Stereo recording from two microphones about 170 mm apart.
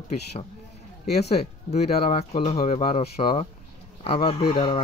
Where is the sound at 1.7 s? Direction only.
40° left (ahead or behind).